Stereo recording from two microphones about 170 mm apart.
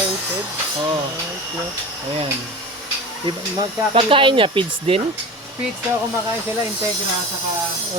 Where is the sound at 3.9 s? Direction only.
30° right (ahead or behind).